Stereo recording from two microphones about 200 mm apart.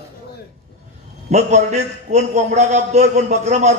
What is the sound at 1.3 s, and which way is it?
A man's voice, 35° right (ahead or behind).